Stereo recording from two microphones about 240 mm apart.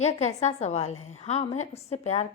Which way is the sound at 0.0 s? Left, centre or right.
Left.